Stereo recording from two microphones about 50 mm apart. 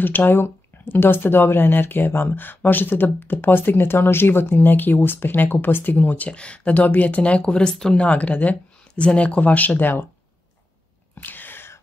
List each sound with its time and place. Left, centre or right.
0.0 s speech: left; by 8.1 s centre
8.1 s speech: left
11.1 s sneeze: left